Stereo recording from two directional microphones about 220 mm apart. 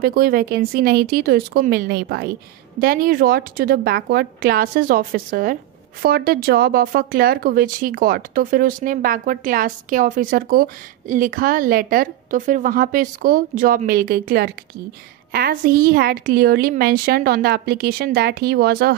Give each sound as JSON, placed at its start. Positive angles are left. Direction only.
{"t": 0.0, "sound": "a woman's voice", "side_deg": -40}